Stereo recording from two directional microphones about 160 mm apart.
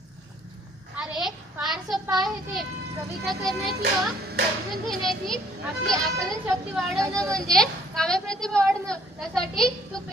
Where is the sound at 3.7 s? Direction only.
90° right.